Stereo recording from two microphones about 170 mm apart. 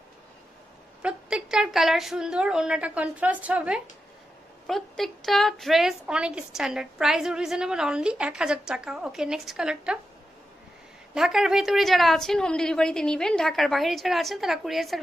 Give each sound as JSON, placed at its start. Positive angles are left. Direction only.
{"t": 1.0, "sound": "a woman's voice", "side_deg": -5}
{"t": 11.1, "sound": "a woman's voice", "side_deg": 0}